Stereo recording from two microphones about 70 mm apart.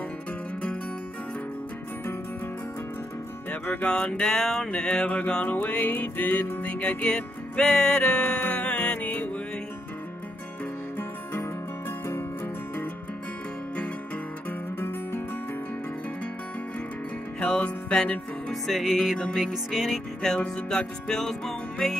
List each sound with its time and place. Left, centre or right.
3.6 s music: left
4.2 s music: centre
4.6 s music: centre
14.8 s music: left
17.4 s music: centre
18.5 s music: centre